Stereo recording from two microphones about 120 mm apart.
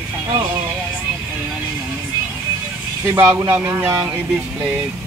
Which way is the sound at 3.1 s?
15° right (ahead or behind).